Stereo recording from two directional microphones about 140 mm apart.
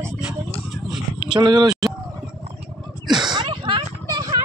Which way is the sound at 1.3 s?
30° right (ahead or behind).